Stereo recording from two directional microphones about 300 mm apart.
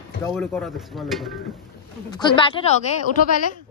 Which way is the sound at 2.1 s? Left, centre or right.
Centre.